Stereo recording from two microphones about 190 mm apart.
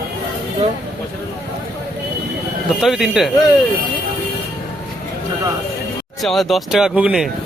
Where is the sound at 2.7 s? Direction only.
Centre (ahead or behind).